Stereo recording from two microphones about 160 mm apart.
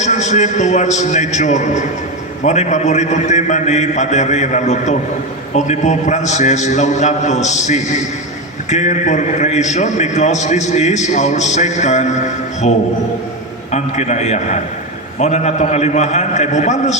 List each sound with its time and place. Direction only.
0.0 s a man's voice: 45° left (ahead or behind)